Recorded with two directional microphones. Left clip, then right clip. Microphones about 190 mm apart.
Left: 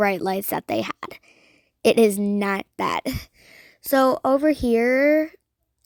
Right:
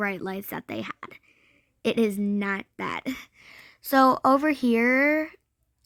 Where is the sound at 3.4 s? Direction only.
15° left (ahead or behind).